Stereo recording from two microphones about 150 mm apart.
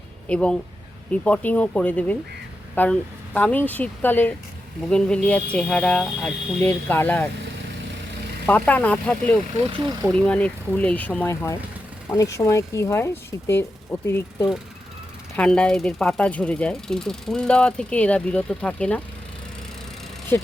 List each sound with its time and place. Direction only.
0.3 s speech: 5° left (ahead or behind)
8.4 s speech: 10° left (ahead or behind)
15.4 s speech: 5° left (ahead or behind)